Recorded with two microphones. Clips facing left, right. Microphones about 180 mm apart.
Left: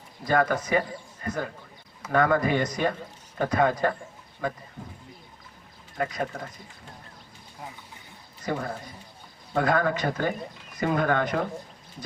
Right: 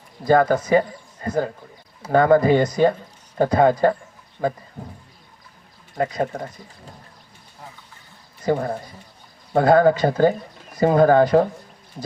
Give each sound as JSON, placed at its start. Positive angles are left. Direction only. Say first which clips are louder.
{"t": 0.3, "sound": "speech", "louder": "right 7 dB", "side_deg": -30}
{"t": 8.4, "sound": "speech", "louder": "right 8 dB", "side_deg": -30}